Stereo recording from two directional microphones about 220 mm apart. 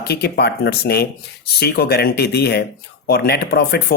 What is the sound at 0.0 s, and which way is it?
Speech, 45° left (ahead or behind).